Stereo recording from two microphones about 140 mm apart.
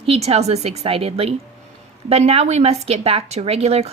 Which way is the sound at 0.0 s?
45° right (ahead or behind).